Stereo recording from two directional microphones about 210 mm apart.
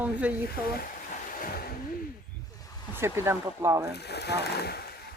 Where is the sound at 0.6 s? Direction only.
45° left (ahead or behind).